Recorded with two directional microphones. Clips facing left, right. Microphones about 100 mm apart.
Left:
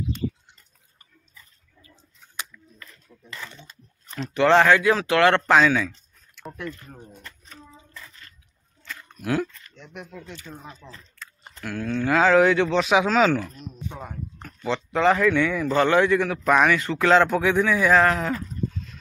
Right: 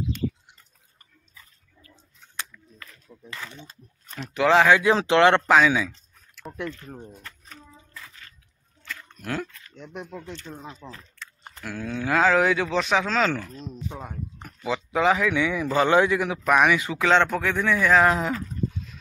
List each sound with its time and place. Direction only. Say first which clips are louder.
4.1 s speech: left 2 dB; centre (ahead or behind)
4.7 s speech: right 1 dB; 20° right (ahead or behind)
5.5 s a sound: even; 5° right (ahead or behind)
9.1 s speech: left 6 dB; 5° left (ahead or behind)
10.8 s speech: right 3 dB; 30° right (ahead or behind)
11.1 s speech: even; centre (ahead or behind)
13.8 s speech: left 2 dB; 10° right (ahead or behind)
16.4 s speech: even; 5° right (ahead or behind)
17.0 s speech: left 3 dB; 5° left (ahead or behind)
18.0 s speech: even; 15° right (ahead or behind)
18.3 s goat: even; 5° right (ahead or behind)